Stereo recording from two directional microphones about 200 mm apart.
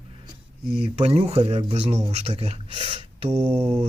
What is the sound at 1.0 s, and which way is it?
Speech, 30° right (ahead or behind).